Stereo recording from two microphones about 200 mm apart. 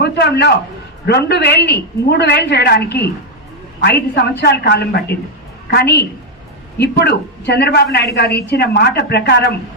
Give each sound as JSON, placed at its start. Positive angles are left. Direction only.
{"t": 0.0, "sound": "a woman's voice", "side_deg": 55}